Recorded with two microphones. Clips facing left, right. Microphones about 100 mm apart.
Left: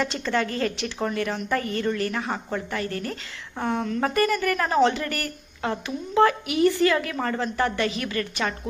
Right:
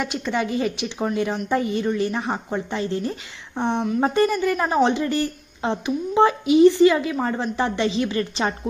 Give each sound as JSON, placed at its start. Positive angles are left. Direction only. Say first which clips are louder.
{"t": 0.0, "sound": "a woman's voice", "louder": "right 1 dB", "side_deg": -15}